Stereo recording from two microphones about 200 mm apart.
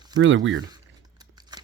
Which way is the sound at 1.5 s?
20° right (ahead or behind).